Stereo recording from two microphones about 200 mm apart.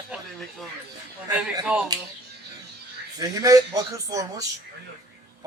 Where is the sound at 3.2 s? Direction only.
15° right (ahead or behind).